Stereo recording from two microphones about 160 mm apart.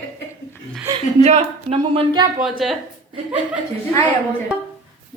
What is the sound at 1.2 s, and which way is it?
Speech, 40° right (ahead or behind).